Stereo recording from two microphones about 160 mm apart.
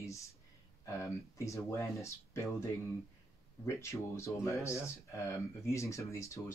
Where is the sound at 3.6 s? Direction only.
20° left (ahead or behind).